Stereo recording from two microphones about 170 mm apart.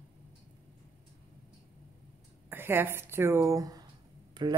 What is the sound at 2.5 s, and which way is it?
Speech, 15° right (ahead or behind).